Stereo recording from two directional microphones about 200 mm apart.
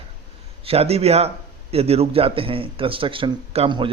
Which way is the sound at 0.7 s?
30° right (ahead or behind).